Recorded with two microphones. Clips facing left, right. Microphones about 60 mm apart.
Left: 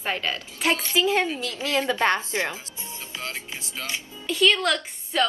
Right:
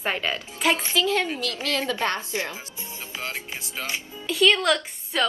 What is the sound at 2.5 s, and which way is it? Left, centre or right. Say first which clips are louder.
Speech: even; right.